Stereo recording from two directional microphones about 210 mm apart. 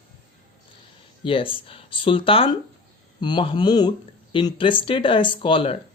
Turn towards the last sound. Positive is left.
turn(degrees=25)  # may be behind; listen again after turning